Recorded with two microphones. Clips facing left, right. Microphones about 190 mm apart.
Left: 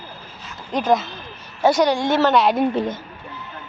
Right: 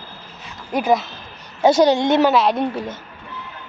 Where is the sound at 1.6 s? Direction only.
25° right (ahead or behind).